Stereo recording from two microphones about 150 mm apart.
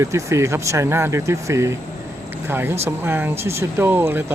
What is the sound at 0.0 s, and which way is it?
Speech, 20° right (ahead or behind).